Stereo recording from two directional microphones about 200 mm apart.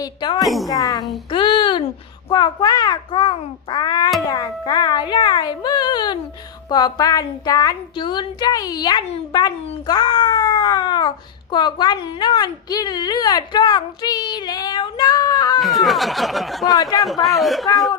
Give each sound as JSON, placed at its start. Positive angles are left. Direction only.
{"t": 0.0, "sound": "a woman's voice", "side_deg": 20}
{"t": 0.4, "sound": "speech", "side_deg": 0}
{"t": 0.7, "sound": "a woman's voice", "side_deg": 20}
{"t": 1.3, "sound": "a sound", "side_deg": 25}
{"t": 2.3, "sound": "a woman's voice", "side_deg": 20}
{"t": 15.6, "sound": "speech", "side_deg": 0}
{"t": 16.7, "sound": "a man's voice", "side_deg": 20}
{"t": 17.0, "sound": "speech", "side_deg": 0}